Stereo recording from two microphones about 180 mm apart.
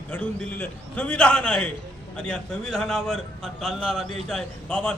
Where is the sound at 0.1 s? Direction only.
10° left (ahead or behind).